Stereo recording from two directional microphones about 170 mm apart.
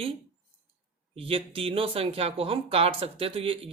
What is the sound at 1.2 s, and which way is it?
Speech, 35° right (ahead or behind).